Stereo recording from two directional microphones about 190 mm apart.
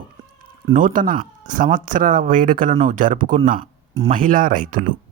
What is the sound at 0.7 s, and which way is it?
Speech, 45° right (ahead or behind).